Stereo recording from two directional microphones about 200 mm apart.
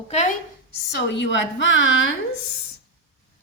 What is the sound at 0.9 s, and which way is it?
A woman's voice, 60° left (ahead or behind).